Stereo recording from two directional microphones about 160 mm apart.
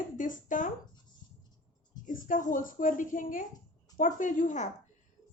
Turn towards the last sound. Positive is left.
turn(degrees=50)  # may be behind; listen again after turning